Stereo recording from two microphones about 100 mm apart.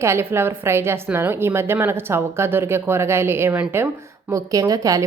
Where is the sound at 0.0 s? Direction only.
25° right (ahead or behind).